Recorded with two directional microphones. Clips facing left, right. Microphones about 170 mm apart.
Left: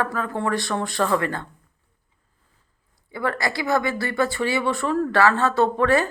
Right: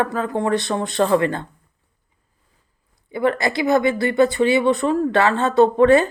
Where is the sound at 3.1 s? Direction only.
20° right (ahead or behind).